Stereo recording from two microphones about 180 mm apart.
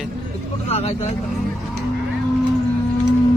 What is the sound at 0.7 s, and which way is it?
Speech, 35° left (ahead or behind).